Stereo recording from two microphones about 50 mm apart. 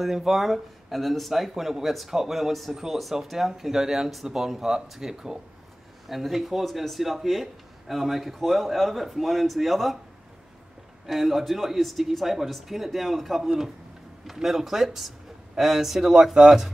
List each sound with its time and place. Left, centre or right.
0.0 s speech: centre
11.1 s speech: centre